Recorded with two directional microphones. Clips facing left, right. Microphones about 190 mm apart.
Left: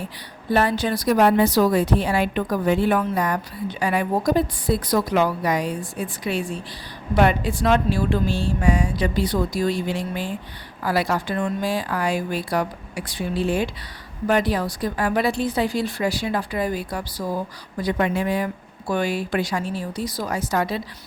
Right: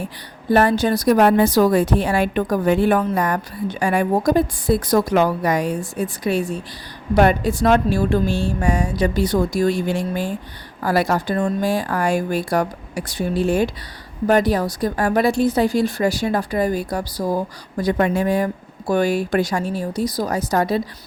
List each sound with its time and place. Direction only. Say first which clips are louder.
0.5 s a woman's voice: right 4 dB; 45° right (ahead or behind)